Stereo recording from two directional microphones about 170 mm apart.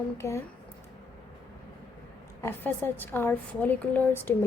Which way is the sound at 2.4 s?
10° left (ahead or behind).